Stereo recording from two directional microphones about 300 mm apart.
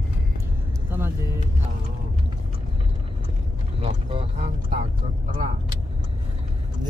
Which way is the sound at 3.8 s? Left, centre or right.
Centre.